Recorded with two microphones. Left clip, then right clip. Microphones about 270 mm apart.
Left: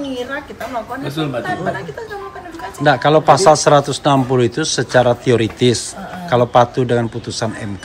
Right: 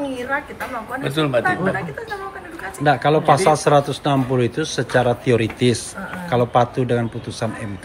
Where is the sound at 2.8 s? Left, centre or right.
Centre.